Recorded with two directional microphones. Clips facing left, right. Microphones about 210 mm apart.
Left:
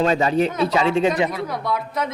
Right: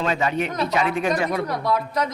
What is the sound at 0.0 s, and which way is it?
Speech, 35° left (ahead or behind).